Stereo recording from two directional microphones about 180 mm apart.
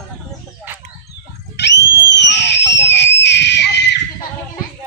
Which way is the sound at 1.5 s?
70° left (ahead or behind).